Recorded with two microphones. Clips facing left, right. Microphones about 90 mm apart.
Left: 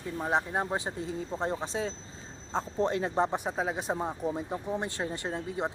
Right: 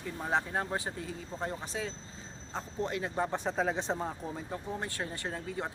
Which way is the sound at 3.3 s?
15° left (ahead or behind).